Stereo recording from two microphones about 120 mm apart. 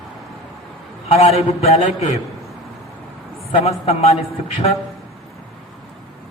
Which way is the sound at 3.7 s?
60° left (ahead or behind).